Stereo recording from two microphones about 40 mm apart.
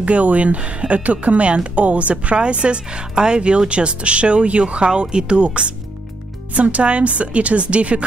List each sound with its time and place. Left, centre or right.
0.0 s a woman's voice: right